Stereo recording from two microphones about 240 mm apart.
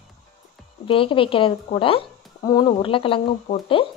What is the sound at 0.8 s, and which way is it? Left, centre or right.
Speech, left.